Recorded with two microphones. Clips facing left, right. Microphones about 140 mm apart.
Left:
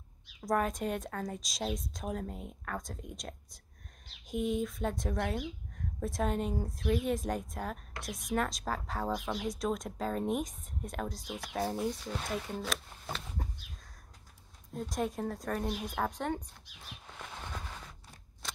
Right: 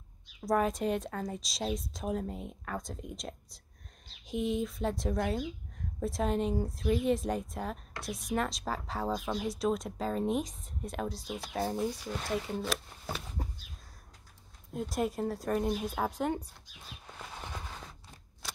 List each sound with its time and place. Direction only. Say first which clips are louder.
0.5 s a woman's voice: right 3 dB; 5° right (ahead or behind)
4.3 s speech: right 1 dB; 45° left (ahead or behind)
4.6 s a woman's voice: right 2 dB; 5° right (ahead or behind)
14.7 s speech: right 2 dB; 5° right (ahead or behind)